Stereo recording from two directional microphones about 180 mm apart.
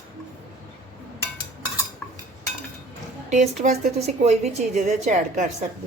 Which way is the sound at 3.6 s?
40° right (ahead or behind).